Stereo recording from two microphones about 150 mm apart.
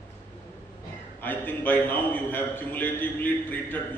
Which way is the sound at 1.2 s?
15° left (ahead or behind).